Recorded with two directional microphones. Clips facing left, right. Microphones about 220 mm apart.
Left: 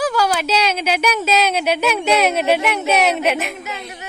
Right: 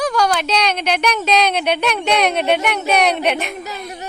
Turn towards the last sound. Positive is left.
turn(degrees=5)  # may be behind; listen again after turning